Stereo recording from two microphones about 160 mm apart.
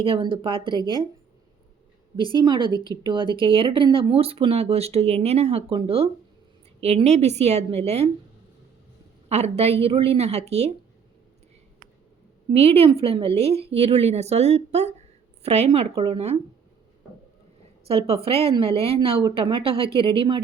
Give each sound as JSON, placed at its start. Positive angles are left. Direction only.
{"t": 0.0, "sound": "speech", "side_deg": -35}
{"t": 2.1, "sound": "speech", "side_deg": -30}
{"t": 9.3, "sound": "speech", "side_deg": -40}
{"t": 12.5, "sound": "speech", "side_deg": -40}
{"t": 17.8, "sound": "speech", "side_deg": -40}